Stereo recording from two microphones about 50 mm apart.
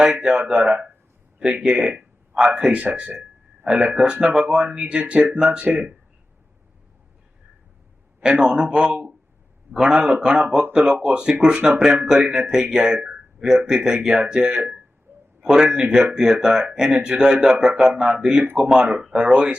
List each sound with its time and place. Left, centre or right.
0.0 s speech: centre
2.0 s a sound: centre
2.7 s speech: right
8.2 s speech: centre